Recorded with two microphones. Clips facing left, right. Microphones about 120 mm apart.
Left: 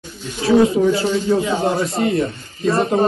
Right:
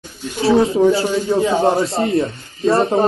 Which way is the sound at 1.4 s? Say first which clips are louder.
Right 4 dB; 35° right (ahead or behind).